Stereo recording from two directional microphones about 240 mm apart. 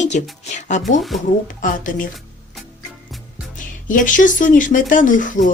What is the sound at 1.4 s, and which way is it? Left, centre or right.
Speech, left.